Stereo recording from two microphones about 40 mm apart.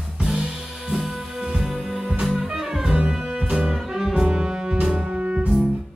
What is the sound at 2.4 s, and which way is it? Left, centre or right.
Music, centre.